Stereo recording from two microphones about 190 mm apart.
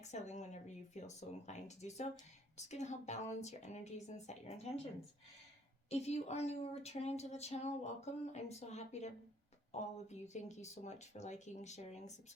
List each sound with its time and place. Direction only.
0.0 s a woman's voice: 35° left (ahead or behind)
5.9 s a woman's voice: 35° left (ahead or behind)